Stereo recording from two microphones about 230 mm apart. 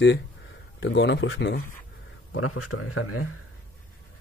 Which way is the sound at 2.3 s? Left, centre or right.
Left.